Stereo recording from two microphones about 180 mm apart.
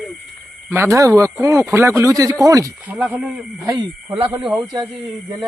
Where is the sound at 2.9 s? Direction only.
5° right (ahead or behind).